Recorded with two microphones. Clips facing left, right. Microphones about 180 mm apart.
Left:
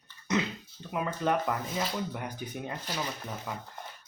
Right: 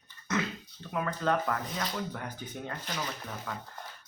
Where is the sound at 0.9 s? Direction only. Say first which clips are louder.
Left 1 dB; 15° left (ahead or behind).